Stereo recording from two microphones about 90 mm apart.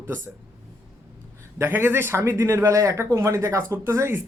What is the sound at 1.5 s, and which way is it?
Speech, 25° right (ahead or behind).